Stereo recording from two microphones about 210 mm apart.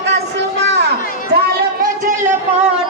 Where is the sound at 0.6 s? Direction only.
55° right (ahead or behind).